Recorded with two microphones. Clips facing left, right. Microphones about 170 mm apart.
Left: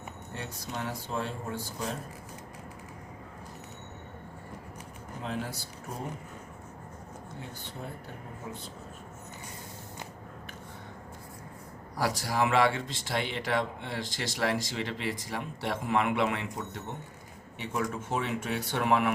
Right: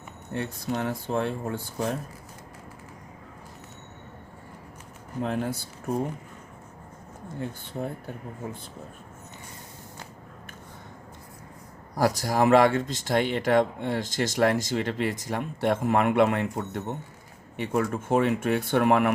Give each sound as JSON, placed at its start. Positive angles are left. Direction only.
{"t": 0.3, "sound": "speech", "side_deg": -55}
{"t": 5.2, "sound": "speech", "side_deg": -55}
{"t": 7.8, "sound": "speech", "side_deg": -55}
{"t": 11.9, "sound": "speech", "side_deg": -45}